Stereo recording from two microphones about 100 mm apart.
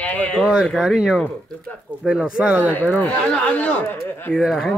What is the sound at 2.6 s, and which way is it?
Speech, 15° left (ahead or behind).